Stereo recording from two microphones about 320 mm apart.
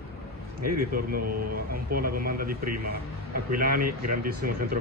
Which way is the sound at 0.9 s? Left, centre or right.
Right.